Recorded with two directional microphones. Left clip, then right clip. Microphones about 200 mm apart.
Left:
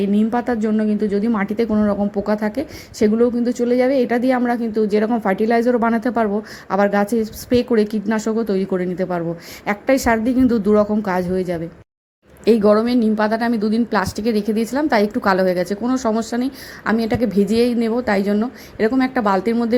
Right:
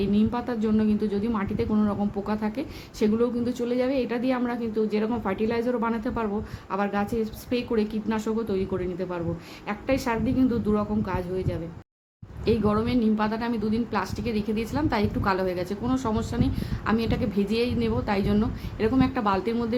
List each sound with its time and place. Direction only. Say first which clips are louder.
0.1 s a woman's voice: left 8 dB; 25° left (ahead or behind)